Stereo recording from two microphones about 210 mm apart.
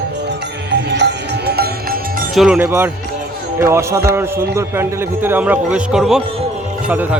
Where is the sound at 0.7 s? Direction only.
55° right (ahead or behind).